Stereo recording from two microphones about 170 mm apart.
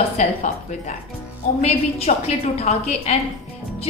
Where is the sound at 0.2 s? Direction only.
45° left (ahead or behind).